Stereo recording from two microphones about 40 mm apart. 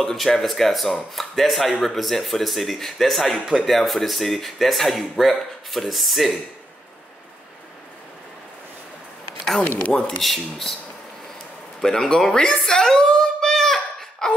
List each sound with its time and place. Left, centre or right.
0.0 s speech: centre
9.6 s speech: left
9.9 s speech: left
10.2 s speech: centre
11.8 s speech: centre
12.6 s a sound: centre